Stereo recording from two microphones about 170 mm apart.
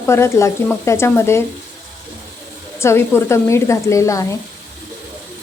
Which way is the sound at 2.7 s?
15° left (ahead or behind).